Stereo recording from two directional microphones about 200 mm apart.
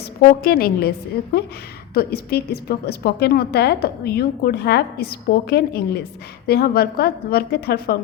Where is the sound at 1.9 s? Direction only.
50° left (ahead or behind).